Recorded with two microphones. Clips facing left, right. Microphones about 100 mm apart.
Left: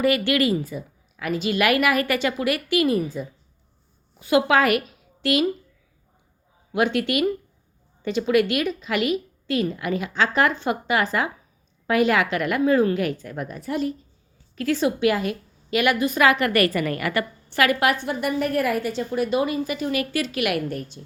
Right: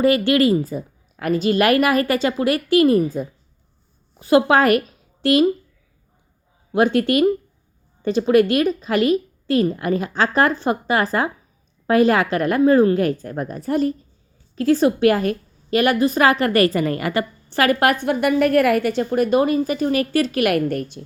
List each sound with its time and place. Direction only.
0.0 s a woman's voice: 30° right (ahead or behind)
6.7 s a woman's voice: 40° right (ahead or behind); by 21.0 s 60° right (ahead or behind)